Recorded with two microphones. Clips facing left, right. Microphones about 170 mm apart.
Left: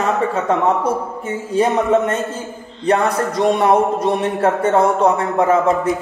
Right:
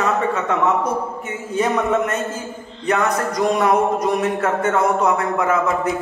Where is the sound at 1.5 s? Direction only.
30° left (ahead or behind).